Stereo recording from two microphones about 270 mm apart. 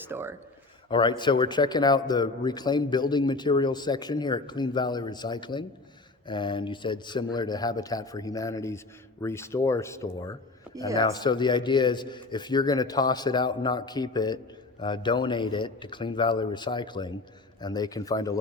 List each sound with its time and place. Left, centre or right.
0.0 s speech: centre
0.9 s speech: centre